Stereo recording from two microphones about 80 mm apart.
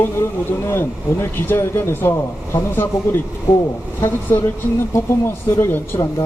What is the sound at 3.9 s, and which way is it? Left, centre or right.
A man's voice, left.